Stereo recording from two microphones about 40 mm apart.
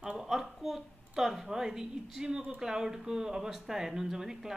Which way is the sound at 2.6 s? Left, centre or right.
Centre.